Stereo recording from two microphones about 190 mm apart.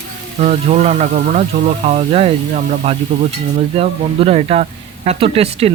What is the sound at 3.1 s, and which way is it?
Speech, 50° right (ahead or behind).